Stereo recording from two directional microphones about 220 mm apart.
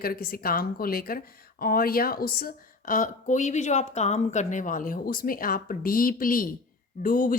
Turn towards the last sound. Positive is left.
turn(degrees=40)  # may be behind; listen again after turning